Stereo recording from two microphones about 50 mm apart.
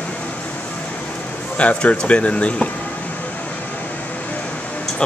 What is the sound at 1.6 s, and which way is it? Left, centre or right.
Speech, left.